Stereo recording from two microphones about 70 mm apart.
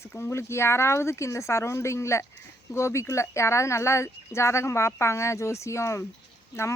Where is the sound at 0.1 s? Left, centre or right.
Left.